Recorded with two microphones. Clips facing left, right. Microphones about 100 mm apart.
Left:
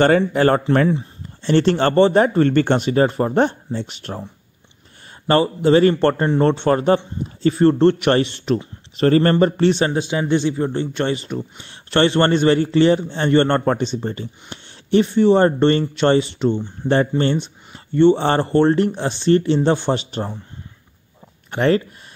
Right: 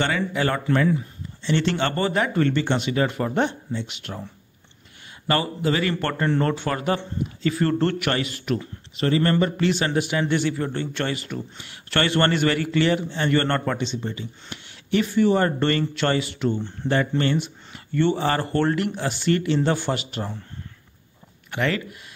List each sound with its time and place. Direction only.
0.0 s speech: 45° left (ahead or behind)
2.5 s speech: 50° left (ahead or behind)
5.3 s a man's voice: 30° left (ahead or behind)
8.9 s a man's voice: 40° left (ahead or behind); by 13.6 s 25° left (ahead or behind)
13.7 s a man's voice: 40° left (ahead or behind); by 16.7 s 20° left (ahead or behind)
16.8 s speech: 35° left (ahead or behind)
17.7 s a man's voice: 25° left (ahead or behind)
21.5 s speech: 35° left (ahead or behind)